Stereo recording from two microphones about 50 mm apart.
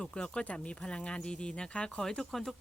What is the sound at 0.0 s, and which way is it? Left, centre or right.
Speech, centre.